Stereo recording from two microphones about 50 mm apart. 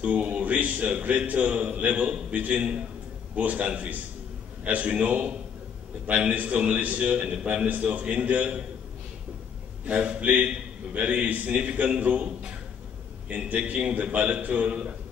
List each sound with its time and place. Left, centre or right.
0.0 s a man's voice: right
9.8 s a man's voice: right
13.3 s a man's voice: right